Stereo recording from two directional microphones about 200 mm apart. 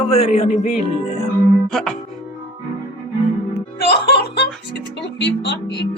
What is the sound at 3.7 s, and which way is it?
Speech, 55° left (ahead or behind).